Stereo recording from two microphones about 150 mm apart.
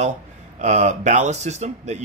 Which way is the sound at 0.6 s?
50° right (ahead or behind).